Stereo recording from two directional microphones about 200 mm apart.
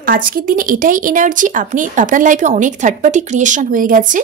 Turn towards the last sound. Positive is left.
turn(degrees=-40)  # may be behind; listen again after turning